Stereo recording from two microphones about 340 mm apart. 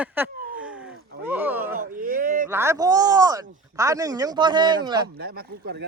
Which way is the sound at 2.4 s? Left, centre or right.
Centre.